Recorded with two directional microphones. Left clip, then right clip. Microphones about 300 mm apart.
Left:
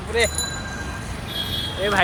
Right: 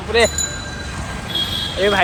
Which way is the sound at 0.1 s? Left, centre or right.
Right.